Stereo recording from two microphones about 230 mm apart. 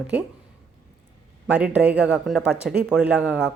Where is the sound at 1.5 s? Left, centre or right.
Centre.